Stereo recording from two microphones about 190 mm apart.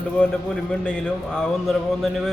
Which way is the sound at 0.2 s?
5° left (ahead or behind).